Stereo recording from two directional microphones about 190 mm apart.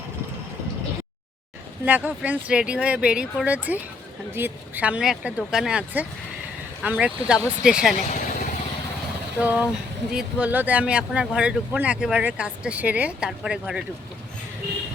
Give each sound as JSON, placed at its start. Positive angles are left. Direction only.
{"t": 1.8, "sound": "speech", "side_deg": -10}
{"t": 7.9, "sound": "vehicle", "side_deg": 40}
{"t": 9.4, "sound": "speech", "side_deg": -10}